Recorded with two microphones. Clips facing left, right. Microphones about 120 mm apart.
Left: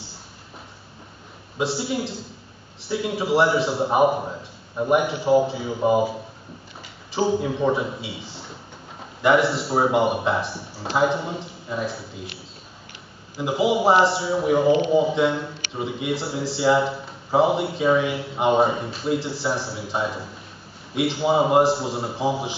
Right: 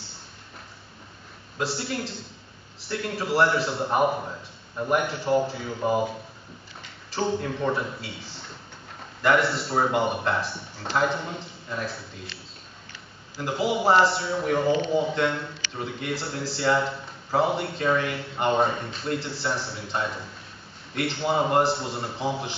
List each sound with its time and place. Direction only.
1.6 s a man's voice: 5° left (ahead or behind)
13.4 s a man's voice: 5° left (ahead or behind)